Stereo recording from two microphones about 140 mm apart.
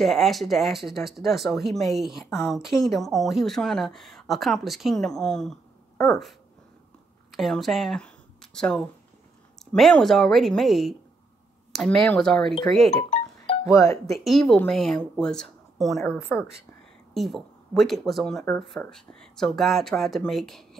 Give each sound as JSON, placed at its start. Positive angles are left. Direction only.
{"t": 0.0, "sound": "speech", "side_deg": 0}
{"t": 13.7, "sound": "speech", "side_deg": 20}
{"t": 14.0, "sound": "speech", "side_deg": 0}
{"t": 17.1, "sound": "speech", "side_deg": 0}